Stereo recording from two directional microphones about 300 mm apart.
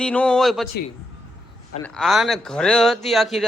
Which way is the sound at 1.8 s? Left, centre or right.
Centre.